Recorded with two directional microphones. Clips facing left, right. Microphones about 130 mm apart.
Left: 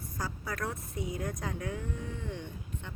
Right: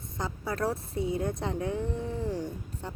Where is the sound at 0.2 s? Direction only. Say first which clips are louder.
Right 5 dB; 25° right (ahead or behind).